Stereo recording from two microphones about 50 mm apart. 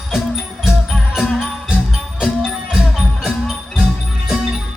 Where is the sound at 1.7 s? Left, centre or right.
Centre.